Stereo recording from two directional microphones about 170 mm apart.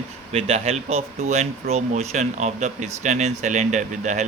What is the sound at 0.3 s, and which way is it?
Speech, 35° right (ahead or behind).